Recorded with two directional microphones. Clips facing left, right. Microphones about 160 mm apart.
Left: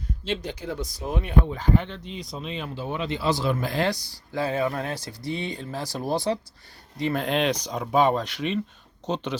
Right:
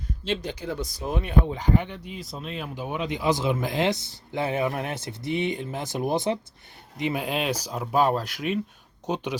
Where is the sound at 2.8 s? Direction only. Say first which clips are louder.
Even; 15° right (ahead or behind).